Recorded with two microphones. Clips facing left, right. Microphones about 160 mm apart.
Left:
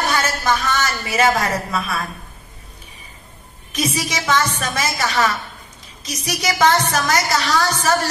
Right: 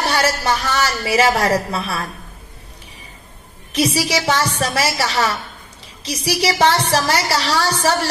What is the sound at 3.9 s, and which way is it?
A woman's voice, 30° right (ahead or behind).